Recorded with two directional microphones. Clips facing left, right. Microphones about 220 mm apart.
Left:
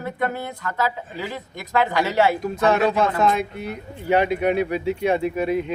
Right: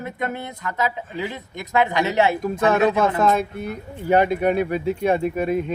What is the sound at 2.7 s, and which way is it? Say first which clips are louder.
Speech: right 2 dB; 50° right (ahead or behind).